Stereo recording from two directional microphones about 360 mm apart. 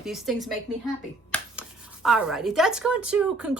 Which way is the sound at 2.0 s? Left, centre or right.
Centre.